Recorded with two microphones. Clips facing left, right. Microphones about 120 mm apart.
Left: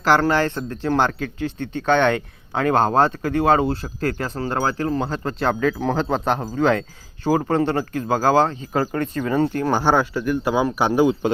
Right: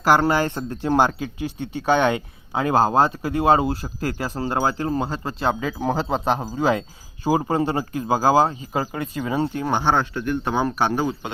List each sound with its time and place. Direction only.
0.0 s speech: 10° right (ahead or behind)
9.8 s speech: 10° left (ahead or behind)